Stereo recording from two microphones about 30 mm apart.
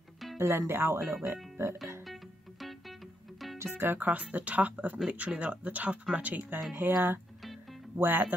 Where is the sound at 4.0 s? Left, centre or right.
Right.